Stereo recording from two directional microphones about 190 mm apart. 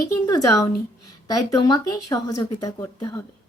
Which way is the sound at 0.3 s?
15° left (ahead or behind).